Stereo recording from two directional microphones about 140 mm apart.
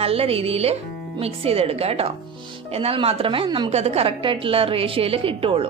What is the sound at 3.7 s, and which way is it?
A woman's voice, 50° right (ahead or behind).